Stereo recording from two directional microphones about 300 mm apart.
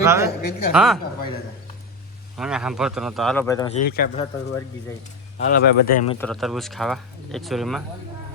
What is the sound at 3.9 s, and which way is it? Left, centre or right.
Speech, left.